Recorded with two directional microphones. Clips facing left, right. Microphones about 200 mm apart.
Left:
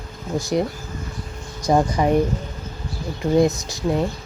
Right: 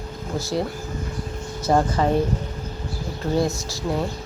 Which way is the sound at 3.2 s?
20° left (ahead or behind).